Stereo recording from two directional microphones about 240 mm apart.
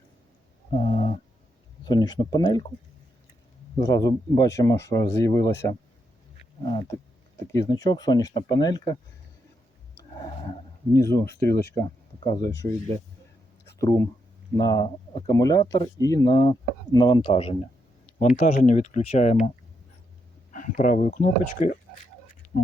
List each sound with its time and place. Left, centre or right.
0.7 s a sound: left
1.8 s speech: centre
3.8 s speech: centre
6.6 s a sound: centre
7.5 s speech: centre
10.0 s roar: centre
10.9 s speech: centre
13.7 s speech: centre; by 19.0 s left
19.1 s a sound: left
20.5 s speech: left